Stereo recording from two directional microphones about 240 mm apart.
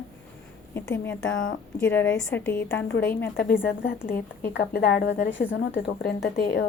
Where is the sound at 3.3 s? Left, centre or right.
Left.